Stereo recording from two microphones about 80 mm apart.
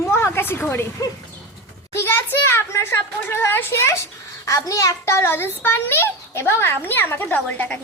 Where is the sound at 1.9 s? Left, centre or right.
Left.